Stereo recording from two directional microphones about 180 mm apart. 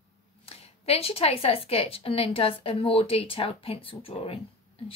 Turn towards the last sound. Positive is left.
turn(degrees=30)  # may be behind; listen again after turning